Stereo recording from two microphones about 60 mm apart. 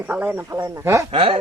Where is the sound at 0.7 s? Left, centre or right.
Right.